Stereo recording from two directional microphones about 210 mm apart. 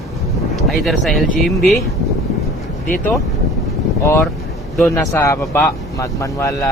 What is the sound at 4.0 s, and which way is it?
Speech, 10° left (ahead or behind).